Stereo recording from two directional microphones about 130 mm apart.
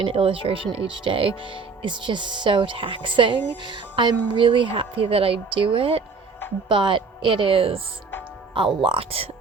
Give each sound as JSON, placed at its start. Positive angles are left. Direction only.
{"t": 0.0, "sound": "a woman's voice", "side_deg": -45}